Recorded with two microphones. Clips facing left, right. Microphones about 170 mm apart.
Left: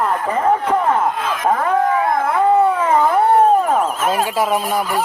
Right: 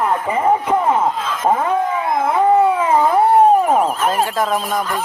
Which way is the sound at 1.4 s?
20° right (ahead or behind).